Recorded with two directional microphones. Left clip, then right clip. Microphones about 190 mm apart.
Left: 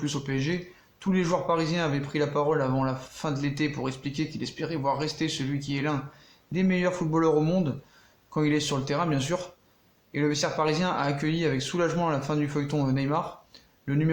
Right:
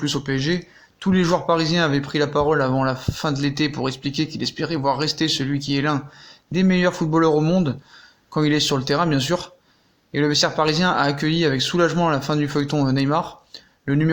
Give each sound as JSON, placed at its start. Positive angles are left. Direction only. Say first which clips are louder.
{"t": 0.0, "sound": "speech", "louder": "right 7 dB", "side_deg": -30}